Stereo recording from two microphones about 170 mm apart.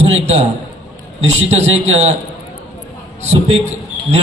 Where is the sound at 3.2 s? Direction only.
40° right (ahead or behind).